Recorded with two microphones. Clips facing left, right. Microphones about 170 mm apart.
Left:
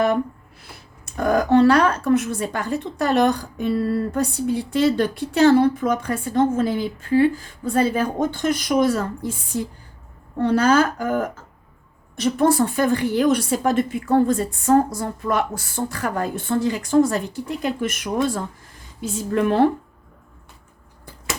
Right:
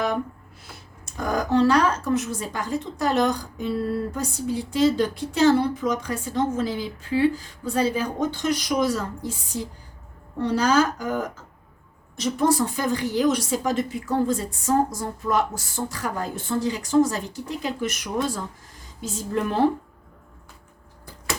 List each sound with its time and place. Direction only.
1.1 s a woman's voice: 60° left (ahead or behind)